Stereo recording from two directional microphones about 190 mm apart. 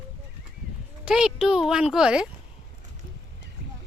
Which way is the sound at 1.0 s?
5° right (ahead or behind).